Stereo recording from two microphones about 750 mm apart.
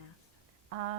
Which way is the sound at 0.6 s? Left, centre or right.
Right.